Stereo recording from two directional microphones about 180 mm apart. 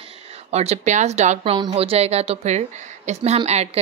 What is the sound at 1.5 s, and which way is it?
A woman's voice, 25° right (ahead or behind).